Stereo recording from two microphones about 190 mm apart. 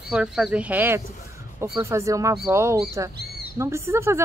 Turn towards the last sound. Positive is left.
turn(degrees=-15)  # may be behind; listen again after turning